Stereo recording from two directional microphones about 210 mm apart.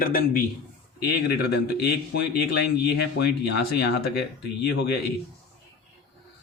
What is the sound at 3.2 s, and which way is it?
Speech, 50° left (ahead or behind).